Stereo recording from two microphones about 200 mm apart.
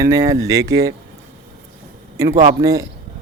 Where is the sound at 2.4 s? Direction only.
15° right (ahead or behind).